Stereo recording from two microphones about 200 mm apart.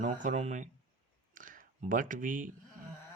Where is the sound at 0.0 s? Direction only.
40° right (ahead or behind).